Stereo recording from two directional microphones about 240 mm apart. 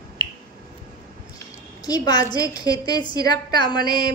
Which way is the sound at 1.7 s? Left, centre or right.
Centre.